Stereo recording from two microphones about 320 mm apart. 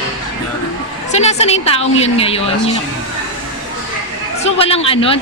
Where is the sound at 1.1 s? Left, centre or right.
Centre.